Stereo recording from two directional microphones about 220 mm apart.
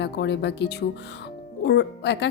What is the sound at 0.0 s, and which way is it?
Speech, 50° left (ahead or behind).